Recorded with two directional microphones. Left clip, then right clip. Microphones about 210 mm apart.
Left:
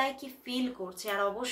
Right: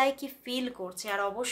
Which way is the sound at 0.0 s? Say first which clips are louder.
Right 5 dB; 35° right (ahead or behind).